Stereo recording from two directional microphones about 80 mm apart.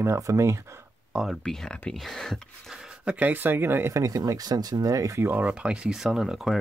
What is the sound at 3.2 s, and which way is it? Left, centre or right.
Speech, right.